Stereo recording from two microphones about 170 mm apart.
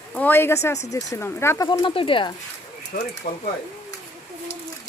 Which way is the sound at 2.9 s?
60° left (ahead or behind).